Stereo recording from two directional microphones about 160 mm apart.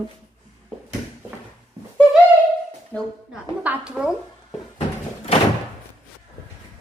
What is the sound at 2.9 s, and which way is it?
Speech, 10° left (ahead or behind).